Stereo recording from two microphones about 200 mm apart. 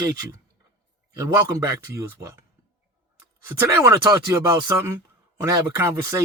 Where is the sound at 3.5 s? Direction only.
15° right (ahead or behind).